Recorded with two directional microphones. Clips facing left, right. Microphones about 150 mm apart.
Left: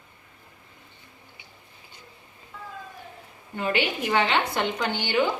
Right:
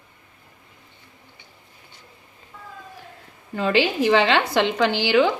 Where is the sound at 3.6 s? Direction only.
90° right.